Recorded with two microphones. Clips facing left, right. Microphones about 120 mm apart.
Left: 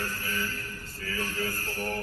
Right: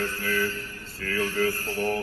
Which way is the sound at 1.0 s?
70° right (ahead or behind).